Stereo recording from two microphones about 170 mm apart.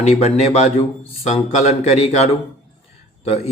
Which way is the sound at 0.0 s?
40° left (ahead or behind).